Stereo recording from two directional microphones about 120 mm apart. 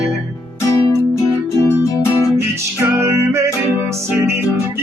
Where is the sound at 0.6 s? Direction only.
25° left (ahead or behind).